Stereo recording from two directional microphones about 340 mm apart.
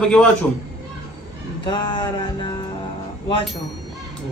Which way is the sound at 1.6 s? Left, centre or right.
Centre.